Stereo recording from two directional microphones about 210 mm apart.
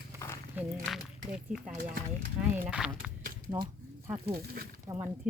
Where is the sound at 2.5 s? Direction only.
5° right (ahead or behind).